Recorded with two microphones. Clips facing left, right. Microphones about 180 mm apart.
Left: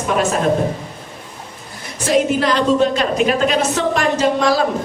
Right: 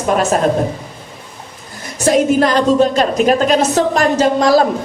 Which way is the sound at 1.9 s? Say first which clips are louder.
Right 4 dB; 45° right (ahead or behind).